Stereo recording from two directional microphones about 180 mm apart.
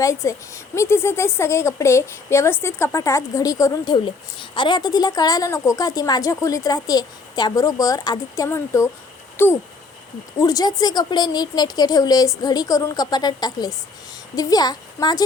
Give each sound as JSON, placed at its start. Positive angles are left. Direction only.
{"t": 0.0, "sound": "a woman's voice", "side_deg": 15}